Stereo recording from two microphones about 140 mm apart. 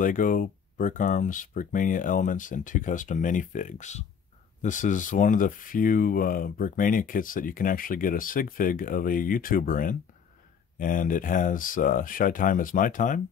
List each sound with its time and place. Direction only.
0.0 s speech: 70° left (ahead or behind)